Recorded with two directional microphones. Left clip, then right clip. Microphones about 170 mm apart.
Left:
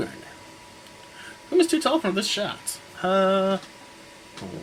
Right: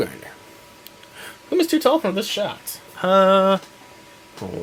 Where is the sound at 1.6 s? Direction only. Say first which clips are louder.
Right 4 dB; 45° right (ahead or behind).